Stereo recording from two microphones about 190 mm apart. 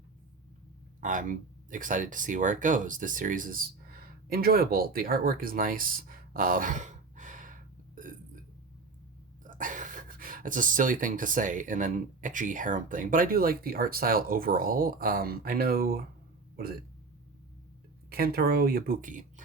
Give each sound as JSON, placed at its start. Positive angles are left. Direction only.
{"t": 1.0, "sound": "speech", "side_deg": -45}
{"t": 4.3, "sound": "a sound", "side_deg": -55}
{"t": 9.4, "sound": "speech", "side_deg": -45}
{"t": 18.1, "sound": "speech", "side_deg": -50}